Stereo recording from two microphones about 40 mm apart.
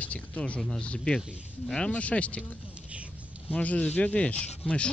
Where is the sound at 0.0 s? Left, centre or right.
Left.